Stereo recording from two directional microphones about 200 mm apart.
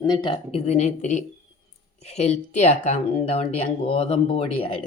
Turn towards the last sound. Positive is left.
turn(degrees=30)  # may be behind; listen again after turning